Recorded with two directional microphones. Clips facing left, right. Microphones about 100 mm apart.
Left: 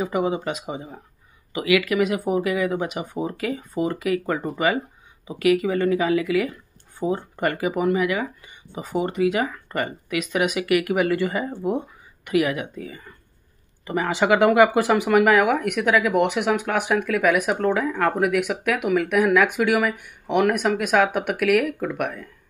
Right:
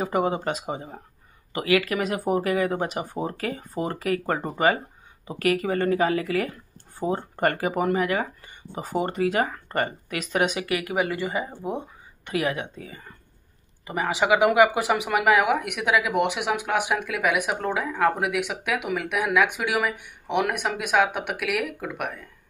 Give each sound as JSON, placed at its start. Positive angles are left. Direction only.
{"t": 0.0, "sound": "speech", "side_deg": -45}
{"t": 12.3, "sound": "speech", "side_deg": -30}
{"t": 13.8, "sound": "speech", "side_deg": -10}